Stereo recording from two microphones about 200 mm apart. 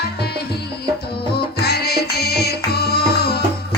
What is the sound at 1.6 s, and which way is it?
Music, 55° left (ahead or behind).